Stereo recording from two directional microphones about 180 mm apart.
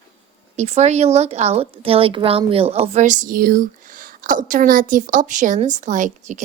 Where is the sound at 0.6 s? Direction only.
40° right (ahead or behind).